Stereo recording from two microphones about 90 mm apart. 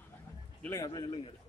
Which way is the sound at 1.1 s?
90° left.